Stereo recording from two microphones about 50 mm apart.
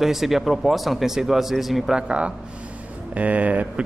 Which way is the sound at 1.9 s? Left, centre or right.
Right.